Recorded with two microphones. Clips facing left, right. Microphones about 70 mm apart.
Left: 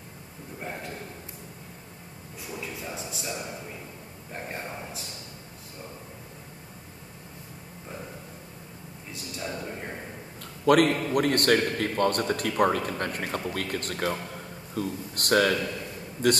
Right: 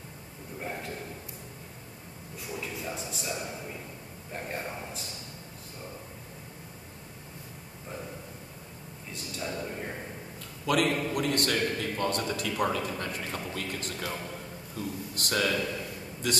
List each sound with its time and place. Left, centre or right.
2.5 s a man's voice: centre
9.1 s a man's voice: centre
10.6 s a man's voice: left